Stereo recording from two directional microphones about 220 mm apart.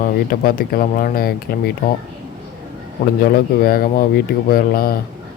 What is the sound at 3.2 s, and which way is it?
Speech, 40° left (ahead or behind).